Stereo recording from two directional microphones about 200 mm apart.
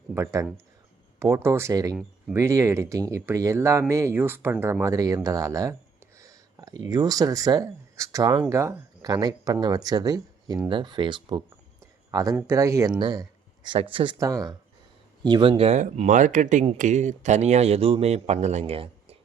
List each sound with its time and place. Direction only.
0.1 s speech: 15° right (ahead or behind)